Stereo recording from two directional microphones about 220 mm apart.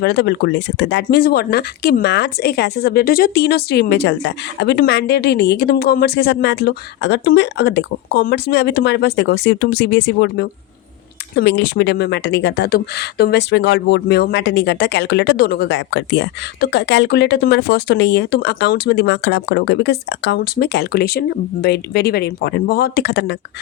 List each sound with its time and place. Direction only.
0.0 s a woman's voice: 50° left (ahead or behind)